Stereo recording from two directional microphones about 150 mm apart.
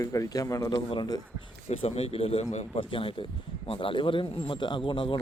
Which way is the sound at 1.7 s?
40° left (ahead or behind).